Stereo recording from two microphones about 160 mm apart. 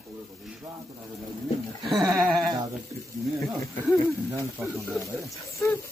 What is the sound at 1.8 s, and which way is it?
Speech, centre (ahead or behind).